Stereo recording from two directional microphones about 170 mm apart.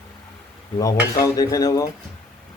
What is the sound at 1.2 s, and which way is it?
Speech, 20° left (ahead or behind).